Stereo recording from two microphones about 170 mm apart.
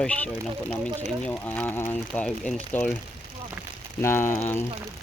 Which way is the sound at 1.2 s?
10° left (ahead or behind).